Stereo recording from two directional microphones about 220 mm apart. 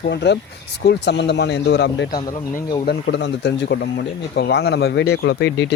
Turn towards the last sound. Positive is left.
turn(degrees=50)  # may be behind; listen again after turning